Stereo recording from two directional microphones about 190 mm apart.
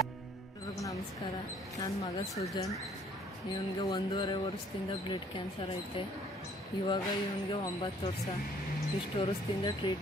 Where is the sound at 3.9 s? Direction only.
25° left (ahead or behind).